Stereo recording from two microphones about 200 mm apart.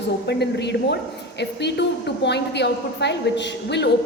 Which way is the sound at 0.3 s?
60° left (ahead or behind).